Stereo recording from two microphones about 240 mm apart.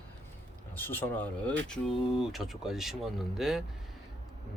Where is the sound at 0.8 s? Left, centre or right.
Centre.